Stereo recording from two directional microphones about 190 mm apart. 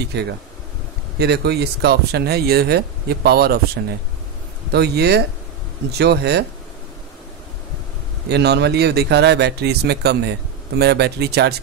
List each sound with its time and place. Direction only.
0.1 s speech: 60° right (ahead or behind)
8.3 s speech: 60° right (ahead or behind)